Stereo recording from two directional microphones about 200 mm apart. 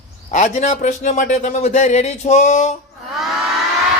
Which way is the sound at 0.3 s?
35° left (ahead or behind).